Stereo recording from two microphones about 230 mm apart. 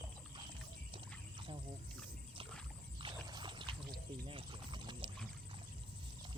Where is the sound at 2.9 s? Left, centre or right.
Right.